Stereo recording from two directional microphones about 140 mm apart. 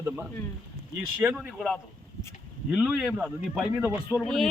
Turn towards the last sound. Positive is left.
turn(degrees=5)  # may be behind; listen again after turning